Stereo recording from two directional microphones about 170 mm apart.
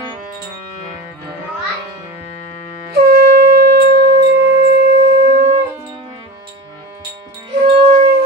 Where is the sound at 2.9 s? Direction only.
65° right (ahead or behind); by 4.6 s 90° right.